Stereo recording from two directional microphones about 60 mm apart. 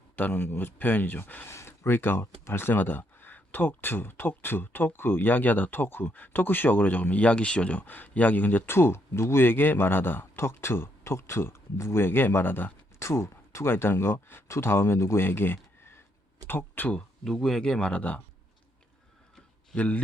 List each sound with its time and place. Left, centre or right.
0.2 s speech: left
1.5 s speech: left
13.0 s speech: left
17.2 s speech: centre; by 18.2 s left
19.7 s a man's voice: left